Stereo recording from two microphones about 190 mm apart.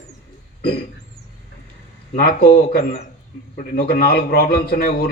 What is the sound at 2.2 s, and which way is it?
A man's voice, 55° left (ahead or behind).